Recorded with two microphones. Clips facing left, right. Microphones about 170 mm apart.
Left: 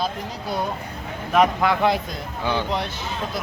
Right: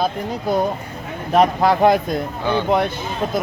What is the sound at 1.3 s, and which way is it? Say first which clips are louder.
Speech: right 3 dB; 35° right (ahead or behind).